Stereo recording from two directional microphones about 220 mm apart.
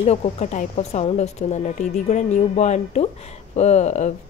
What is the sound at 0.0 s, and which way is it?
Speech, 30° left (ahead or behind).